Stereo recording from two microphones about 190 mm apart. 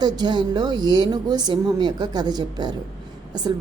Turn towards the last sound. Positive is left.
turn(degrees=-20)  # may be behind; listen again after turning